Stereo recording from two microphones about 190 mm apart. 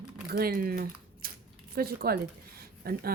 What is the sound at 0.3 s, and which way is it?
Speech, 50° right (ahead or behind).